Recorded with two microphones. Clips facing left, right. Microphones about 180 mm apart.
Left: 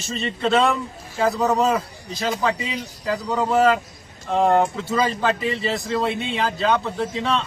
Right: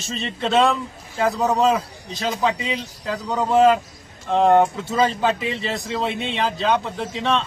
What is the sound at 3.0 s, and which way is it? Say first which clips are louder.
Speech: left 1 dB; 5° left (ahead or behind).